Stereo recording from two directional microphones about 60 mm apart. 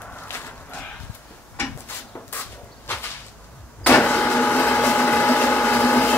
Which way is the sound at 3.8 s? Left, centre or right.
Left.